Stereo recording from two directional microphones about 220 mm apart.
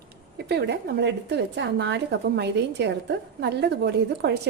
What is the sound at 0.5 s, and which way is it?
A woman's voice, 50° right (ahead or behind).